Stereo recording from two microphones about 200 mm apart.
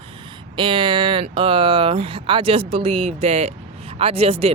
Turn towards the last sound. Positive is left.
turn(degrees=-30)  # may be behind; listen again after turning